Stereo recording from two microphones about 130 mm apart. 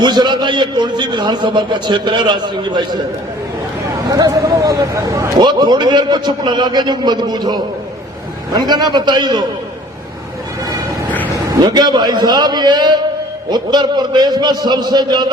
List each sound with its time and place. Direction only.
0.0 s a man's voice: 35° right (ahead or behind)
4.1 s speech: 30° right (ahead or behind)
5.4 s a man's voice: 35° right (ahead or behind)
11.6 s a man's voice: 35° right (ahead or behind)